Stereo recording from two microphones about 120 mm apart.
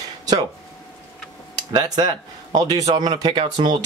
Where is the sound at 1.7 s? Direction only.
35° right (ahead or behind).